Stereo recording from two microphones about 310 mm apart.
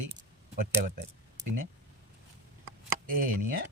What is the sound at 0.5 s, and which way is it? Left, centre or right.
Speech, right.